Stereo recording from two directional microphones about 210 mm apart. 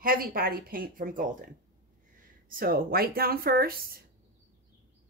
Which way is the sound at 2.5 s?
45° right (ahead or behind).